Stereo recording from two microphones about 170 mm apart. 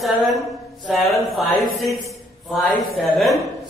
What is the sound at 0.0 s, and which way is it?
Speech, centre (ahead or behind).